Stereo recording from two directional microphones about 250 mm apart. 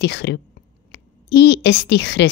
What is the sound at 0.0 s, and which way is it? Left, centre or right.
A woman's voice, left.